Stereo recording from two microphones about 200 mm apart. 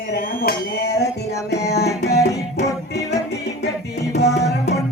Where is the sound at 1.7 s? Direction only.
55° left (ahead or behind).